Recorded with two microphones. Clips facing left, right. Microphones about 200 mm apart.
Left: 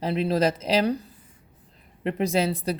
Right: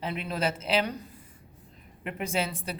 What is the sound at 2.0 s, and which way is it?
Speech, 35° left (ahead or behind).